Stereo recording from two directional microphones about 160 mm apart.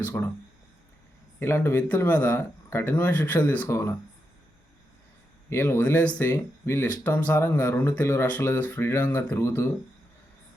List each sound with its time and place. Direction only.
0.1 s speech: 15° left (ahead or behind)
1.4 s speech: 15° left (ahead or behind)
5.5 s speech: 15° left (ahead or behind)